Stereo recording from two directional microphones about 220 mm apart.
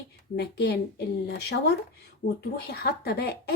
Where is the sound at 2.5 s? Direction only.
45° left (ahead or behind).